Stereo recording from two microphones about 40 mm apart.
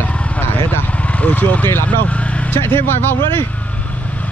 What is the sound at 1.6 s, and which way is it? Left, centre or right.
Speech, left.